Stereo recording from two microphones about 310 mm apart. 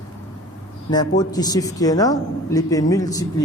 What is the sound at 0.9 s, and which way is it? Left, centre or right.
Speech, centre.